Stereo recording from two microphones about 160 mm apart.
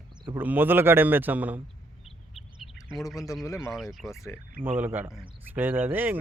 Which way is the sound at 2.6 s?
Centre (ahead or behind).